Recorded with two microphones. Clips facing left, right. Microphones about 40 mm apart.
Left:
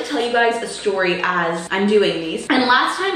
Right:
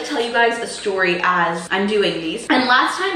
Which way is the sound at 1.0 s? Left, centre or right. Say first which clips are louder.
Right 3 dB; centre.